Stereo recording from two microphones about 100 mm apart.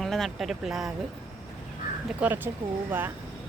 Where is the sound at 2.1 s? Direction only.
20° right (ahead or behind).